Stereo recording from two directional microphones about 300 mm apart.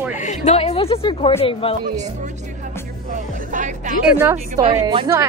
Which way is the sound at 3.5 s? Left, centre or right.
Right.